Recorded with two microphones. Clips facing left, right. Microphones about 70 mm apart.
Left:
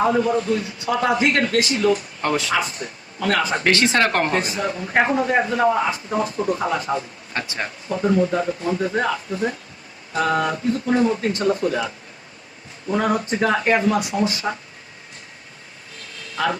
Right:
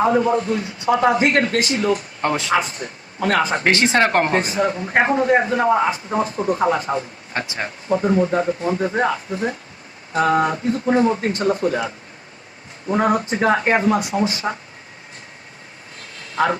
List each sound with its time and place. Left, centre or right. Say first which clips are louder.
0.2 s speech: right 1 dB; right
12.9 s speech: right 2 dB; right
16.3 s speech: right 4 dB; right